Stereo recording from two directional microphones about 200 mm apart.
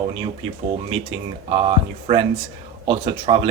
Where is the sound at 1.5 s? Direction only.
30° right (ahead or behind).